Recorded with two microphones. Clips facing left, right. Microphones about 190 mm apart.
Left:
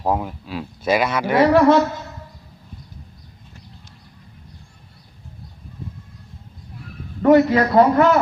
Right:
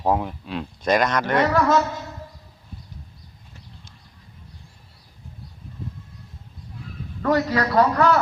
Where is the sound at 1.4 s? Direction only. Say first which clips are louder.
Left 9 dB; 30° left (ahead or behind).